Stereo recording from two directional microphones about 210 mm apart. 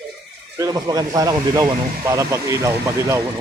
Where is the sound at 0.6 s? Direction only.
15° right (ahead or behind).